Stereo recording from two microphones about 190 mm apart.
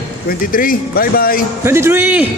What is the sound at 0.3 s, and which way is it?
Speech, 45° left (ahead or behind).